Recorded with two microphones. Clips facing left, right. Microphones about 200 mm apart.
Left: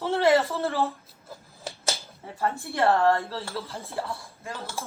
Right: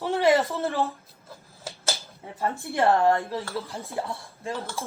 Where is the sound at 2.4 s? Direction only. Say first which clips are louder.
Right 1 dB; 15° right (ahead or behind).